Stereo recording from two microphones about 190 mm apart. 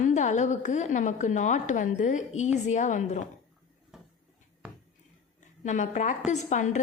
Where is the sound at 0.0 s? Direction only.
40° left (ahead or behind).